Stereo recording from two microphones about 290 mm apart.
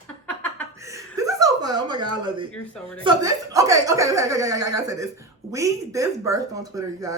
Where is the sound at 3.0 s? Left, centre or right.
Centre.